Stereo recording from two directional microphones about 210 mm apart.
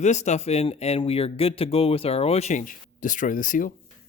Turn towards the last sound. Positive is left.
turn(degrees=40)  # may be behind; listen again after turning